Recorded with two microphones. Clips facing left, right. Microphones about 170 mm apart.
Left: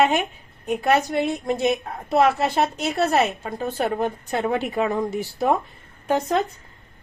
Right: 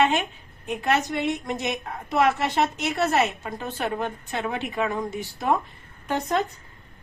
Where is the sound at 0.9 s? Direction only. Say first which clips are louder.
Left 3 dB; 35° left (ahead or behind).